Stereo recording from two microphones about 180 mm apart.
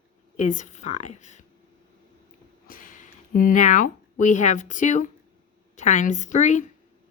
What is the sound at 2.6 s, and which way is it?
A woman's voice, 50° left (ahead or behind).